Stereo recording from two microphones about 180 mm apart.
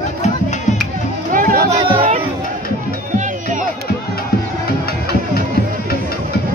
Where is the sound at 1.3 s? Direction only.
50° right (ahead or behind).